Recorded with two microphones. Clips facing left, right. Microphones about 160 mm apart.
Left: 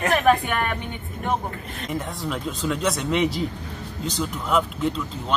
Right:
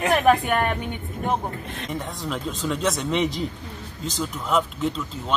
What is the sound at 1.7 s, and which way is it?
Speech, 5° left (ahead or behind).